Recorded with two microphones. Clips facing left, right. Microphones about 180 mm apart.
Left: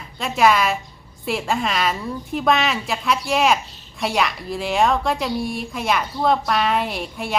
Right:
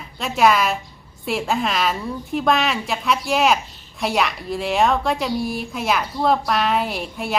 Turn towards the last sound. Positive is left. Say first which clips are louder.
# right 1 dB
turn(degrees=0)  # may be behind; listen again after turning